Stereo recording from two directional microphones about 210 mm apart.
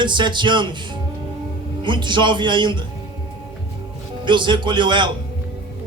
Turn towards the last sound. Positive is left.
turn(degrees=-20)  # may be behind; listen again after turning